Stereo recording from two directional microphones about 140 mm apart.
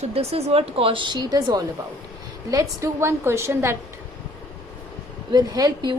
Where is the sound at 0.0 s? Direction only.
45° right (ahead or behind); by 3.8 s 20° right (ahead or behind).